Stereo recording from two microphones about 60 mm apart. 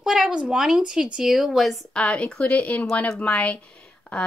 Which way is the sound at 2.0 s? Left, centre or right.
Centre.